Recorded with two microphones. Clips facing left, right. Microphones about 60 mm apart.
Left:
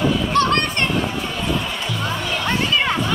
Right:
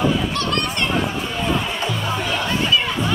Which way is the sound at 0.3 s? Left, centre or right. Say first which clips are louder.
Left 6 dB; left.